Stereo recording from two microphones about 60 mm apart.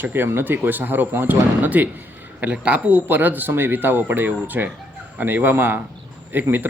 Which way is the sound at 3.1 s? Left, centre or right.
Right.